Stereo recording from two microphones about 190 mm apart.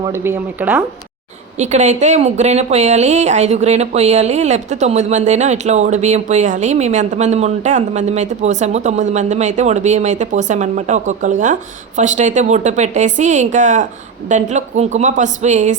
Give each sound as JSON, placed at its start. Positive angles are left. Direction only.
{"t": 0.0, "sound": "speech", "side_deg": -15}
{"t": 1.5, "sound": "speech", "side_deg": -35}